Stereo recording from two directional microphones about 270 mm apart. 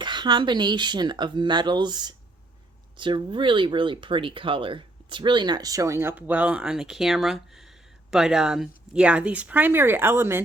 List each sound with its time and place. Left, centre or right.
0.0 s speech: centre